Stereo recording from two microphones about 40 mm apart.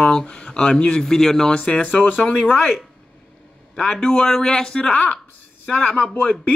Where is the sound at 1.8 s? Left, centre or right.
Left.